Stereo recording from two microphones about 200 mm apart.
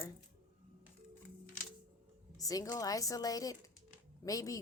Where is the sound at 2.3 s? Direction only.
15° left (ahead or behind).